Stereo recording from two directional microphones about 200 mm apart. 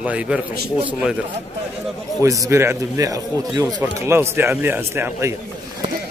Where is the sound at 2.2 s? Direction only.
15° right (ahead or behind).